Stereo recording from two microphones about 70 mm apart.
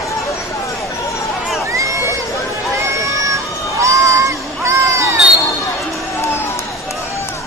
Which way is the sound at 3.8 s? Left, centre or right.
Right.